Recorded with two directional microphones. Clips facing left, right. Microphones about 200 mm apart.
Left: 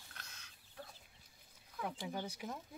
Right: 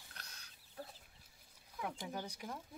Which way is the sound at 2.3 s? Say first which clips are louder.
Left 2 dB; 5° left (ahead or behind).